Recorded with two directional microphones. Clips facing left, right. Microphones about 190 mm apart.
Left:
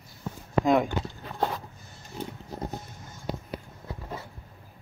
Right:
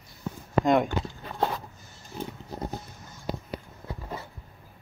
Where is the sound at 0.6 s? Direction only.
Centre (ahead or behind).